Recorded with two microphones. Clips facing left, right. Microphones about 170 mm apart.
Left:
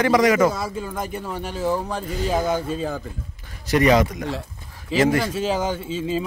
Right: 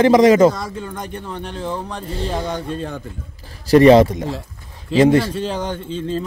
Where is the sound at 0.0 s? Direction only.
25° right (ahead or behind).